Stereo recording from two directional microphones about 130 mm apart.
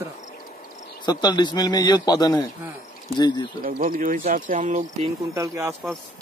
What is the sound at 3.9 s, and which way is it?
Speech, 90° right.